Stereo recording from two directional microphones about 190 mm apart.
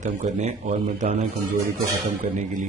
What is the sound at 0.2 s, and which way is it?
Speech, 35° right (ahead or behind).